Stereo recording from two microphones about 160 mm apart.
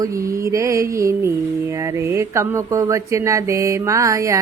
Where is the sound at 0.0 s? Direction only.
20° right (ahead or behind).